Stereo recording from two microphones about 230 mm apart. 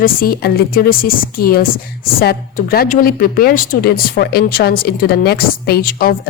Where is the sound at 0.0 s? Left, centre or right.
Left.